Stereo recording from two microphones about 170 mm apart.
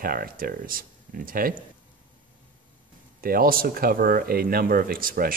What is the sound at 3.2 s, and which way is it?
Speech, 60° right (ahead or behind).